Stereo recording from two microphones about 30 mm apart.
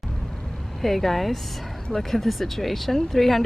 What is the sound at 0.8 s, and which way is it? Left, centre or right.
Speech, centre.